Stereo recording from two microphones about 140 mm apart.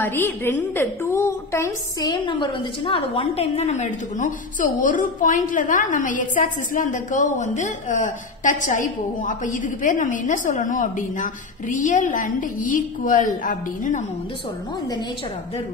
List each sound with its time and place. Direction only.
0.0 s a woman's voice: 15° left (ahead or behind); by 14.0 s 65° left (ahead or behind)